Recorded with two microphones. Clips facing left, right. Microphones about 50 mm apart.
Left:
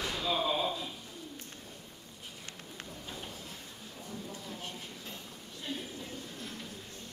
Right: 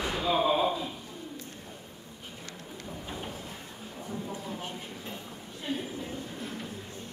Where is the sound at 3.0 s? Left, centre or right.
Right.